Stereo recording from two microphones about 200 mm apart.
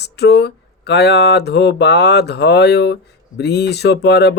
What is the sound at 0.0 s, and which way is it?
Speech, 55° left (ahead or behind).